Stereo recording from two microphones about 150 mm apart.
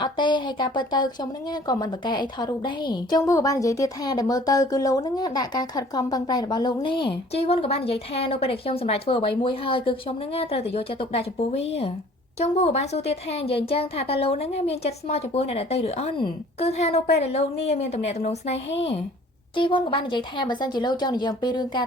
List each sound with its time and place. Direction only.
0.0 s a woman's voice: 30° left (ahead or behind)
19.5 s a woman's voice: 35° left (ahead or behind)